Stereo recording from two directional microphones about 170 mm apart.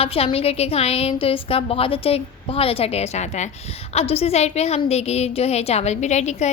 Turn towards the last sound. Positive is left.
turn(degrees=40)  # may be behind; listen again after turning